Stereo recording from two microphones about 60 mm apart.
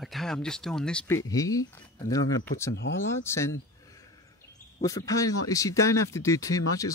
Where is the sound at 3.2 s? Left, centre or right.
Left.